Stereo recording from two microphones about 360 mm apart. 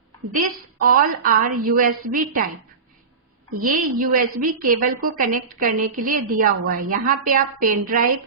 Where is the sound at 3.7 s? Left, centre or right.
Right.